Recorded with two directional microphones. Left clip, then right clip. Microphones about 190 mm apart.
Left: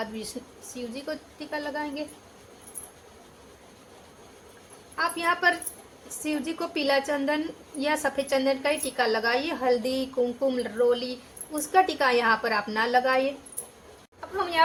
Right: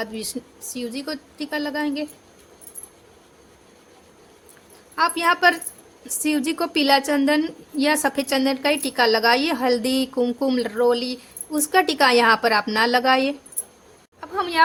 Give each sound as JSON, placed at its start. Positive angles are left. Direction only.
{"t": 0.7, "sound": "a woman's voice", "side_deg": -60}
{"t": 4.9, "sound": "a woman's voice", "side_deg": -55}
{"t": 14.2, "sound": "a sound", "side_deg": -55}